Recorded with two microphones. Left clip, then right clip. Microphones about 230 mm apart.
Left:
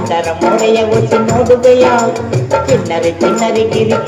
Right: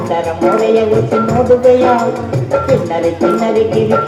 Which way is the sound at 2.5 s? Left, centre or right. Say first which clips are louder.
Left 1 dB; left.